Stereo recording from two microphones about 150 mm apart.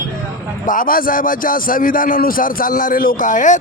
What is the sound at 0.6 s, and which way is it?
A man's voice, 65° left (ahead or behind).